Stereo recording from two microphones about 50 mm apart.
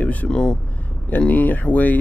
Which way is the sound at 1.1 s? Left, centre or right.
Left.